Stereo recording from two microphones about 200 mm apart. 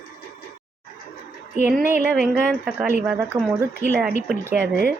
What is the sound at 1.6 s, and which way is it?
A woman's voice, 5° right (ahead or behind).